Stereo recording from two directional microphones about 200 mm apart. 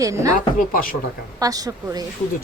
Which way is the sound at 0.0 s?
15° right (ahead or behind).